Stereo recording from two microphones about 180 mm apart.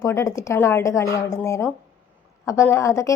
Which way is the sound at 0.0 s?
15° left (ahead or behind).